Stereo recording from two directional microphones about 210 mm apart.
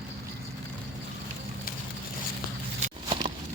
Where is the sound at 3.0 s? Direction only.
25° right (ahead or behind).